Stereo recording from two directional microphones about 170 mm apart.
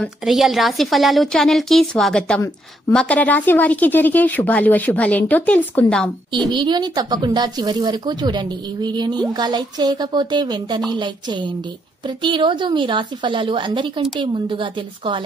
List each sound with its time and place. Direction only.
0.0 s a woman's voice: centre (ahead or behind)
6.5 s speech: 25° right (ahead or behind)